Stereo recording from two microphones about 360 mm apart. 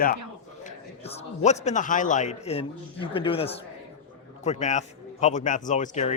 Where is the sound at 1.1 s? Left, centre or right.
Centre.